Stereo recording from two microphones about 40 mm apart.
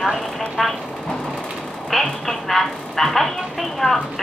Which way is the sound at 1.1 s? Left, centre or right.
Centre.